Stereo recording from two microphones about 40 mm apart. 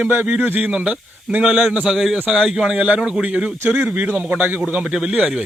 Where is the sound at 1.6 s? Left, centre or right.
Right.